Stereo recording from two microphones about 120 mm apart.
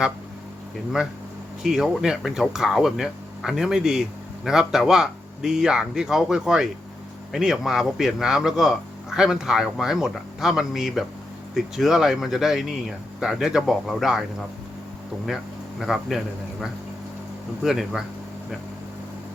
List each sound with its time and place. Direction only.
1.6 s a man's voice: 5° right (ahead or behind)
15.8 s a man's voice: 5° right (ahead or behind)